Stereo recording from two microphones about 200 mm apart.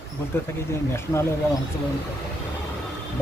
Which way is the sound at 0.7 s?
15° left (ahead or behind).